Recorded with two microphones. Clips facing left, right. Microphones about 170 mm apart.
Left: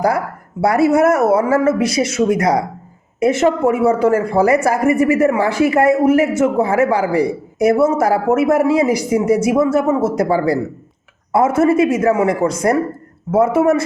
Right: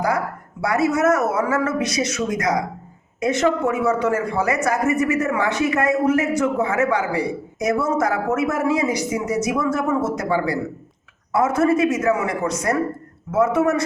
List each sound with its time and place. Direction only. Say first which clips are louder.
0.6 s a man's voice: left 6 dB; 30° left (ahead or behind)